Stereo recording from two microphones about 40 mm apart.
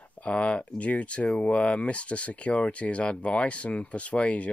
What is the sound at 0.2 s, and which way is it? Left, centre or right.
Speech, left.